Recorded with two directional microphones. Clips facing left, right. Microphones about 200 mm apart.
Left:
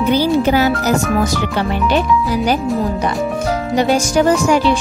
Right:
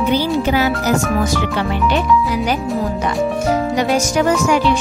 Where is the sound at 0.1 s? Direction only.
40° left (ahead or behind).